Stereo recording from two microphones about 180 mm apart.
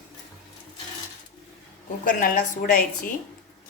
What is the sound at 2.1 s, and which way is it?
Speech, 50° left (ahead or behind).